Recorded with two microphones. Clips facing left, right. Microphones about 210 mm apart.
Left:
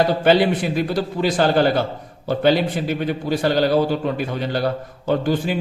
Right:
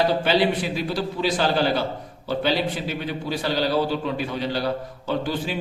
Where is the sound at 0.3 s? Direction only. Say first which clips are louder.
Left 5 dB; 50° left (ahead or behind).